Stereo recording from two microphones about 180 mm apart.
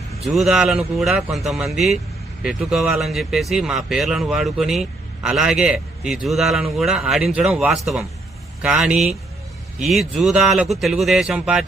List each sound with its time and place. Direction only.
0.3 s speech: centre (ahead or behind)